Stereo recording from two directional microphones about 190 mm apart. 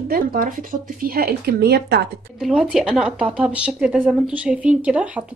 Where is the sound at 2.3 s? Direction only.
5° right (ahead or behind).